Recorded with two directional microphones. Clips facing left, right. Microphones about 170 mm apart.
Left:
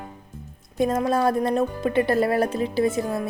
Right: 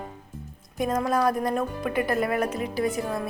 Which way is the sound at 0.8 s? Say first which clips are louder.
Left 3 dB; 25° left (ahead or behind).